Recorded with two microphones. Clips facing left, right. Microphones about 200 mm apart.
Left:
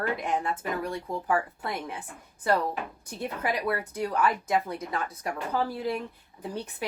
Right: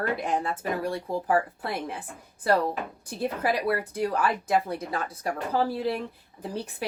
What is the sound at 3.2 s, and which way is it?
Speech, 35° right (ahead or behind).